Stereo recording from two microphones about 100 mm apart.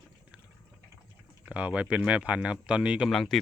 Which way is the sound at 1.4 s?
10° right (ahead or behind).